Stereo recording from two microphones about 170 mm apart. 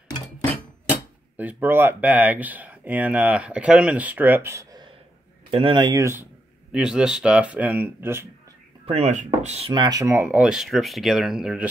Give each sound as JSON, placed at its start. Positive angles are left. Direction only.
{"t": 1.3, "sound": "speech", "side_deg": -10}
{"t": 5.5, "sound": "speech", "side_deg": -30}
{"t": 6.7, "sound": "speech", "side_deg": -5}
{"t": 8.8, "sound": "speech", "side_deg": -40}